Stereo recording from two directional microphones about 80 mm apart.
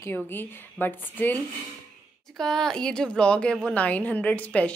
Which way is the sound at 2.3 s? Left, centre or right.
Centre.